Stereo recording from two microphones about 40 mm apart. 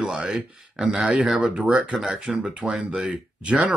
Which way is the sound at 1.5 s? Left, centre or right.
Right.